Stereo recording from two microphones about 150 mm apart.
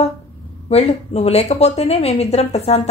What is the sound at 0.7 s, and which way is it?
A woman's voice, 45° left (ahead or behind).